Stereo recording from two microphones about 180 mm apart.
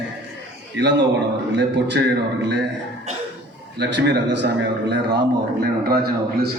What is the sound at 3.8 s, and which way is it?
A man's voice, 70° right (ahead or behind).